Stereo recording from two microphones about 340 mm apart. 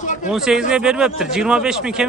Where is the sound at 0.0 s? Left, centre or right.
Left.